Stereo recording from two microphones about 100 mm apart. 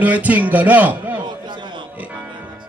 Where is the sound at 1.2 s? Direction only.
50° right (ahead or behind).